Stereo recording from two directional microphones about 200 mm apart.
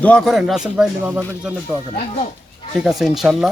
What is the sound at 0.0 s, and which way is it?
Speech, 5° left (ahead or behind).